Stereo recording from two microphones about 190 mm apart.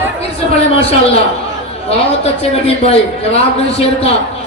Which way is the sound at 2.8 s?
35° left (ahead or behind).